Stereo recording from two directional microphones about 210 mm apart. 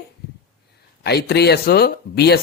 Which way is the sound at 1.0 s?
50° left (ahead or behind).